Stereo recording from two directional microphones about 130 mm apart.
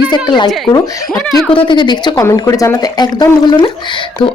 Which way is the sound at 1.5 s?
40° left (ahead or behind).